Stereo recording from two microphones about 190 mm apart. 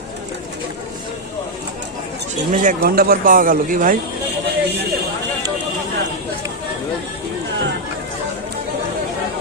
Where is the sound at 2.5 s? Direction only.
40° right (ahead or behind).